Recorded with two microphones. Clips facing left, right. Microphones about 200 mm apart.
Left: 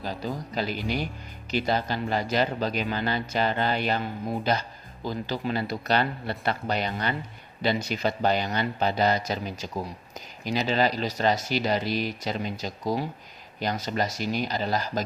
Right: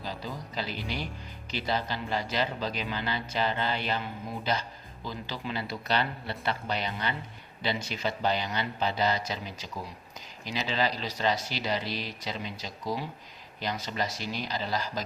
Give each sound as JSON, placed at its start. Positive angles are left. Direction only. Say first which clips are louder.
{"t": 0.0, "sound": "speech", "louder": "left 5 dB", "side_deg": 50}